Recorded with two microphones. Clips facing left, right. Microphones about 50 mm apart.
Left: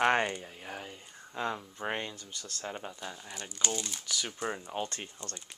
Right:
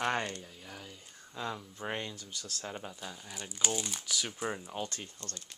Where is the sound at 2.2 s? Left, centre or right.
Centre.